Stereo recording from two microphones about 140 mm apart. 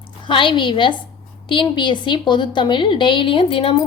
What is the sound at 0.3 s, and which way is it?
A woman's voice, 35° left (ahead or behind).